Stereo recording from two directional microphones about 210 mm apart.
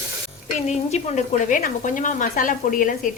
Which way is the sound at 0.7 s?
30° left (ahead or behind).